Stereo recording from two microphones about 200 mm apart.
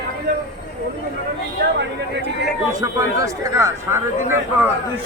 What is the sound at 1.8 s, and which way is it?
Speech, 60° right (ahead or behind).